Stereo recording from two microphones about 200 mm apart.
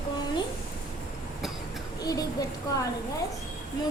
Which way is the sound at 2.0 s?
20° left (ahead or behind).